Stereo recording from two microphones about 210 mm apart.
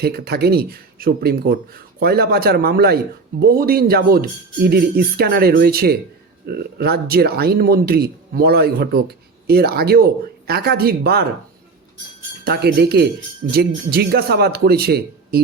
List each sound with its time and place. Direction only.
0.0 s speech: 50° right (ahead or behind)
12.5 s speech: 50° right (ahead or behind)